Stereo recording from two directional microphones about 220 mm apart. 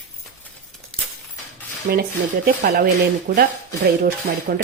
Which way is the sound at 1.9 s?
45° right (ahead or behind).